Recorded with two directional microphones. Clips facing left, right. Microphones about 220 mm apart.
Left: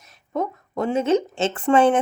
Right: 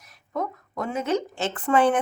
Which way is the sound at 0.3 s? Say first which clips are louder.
Left 4 dB; 30° left (ahead or behind).